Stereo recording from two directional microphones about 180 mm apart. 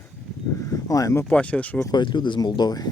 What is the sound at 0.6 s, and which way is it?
Speech, 15° left (ahead or behind).